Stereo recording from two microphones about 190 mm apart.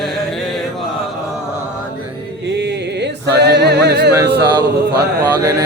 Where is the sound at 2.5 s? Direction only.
60° right (ahead or behind).